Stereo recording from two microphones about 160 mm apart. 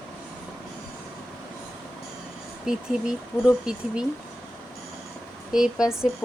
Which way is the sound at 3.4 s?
5° right (ahead or behind).